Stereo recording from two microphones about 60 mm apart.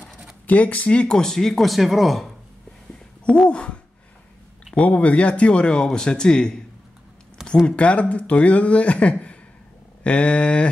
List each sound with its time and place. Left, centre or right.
0.5 s speech: left; by 2.3 s centre
3.4 s speech: centre
7.6 s speech: left